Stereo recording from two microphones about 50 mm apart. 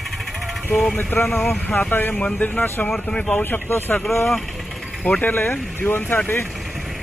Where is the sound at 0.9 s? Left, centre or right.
Left.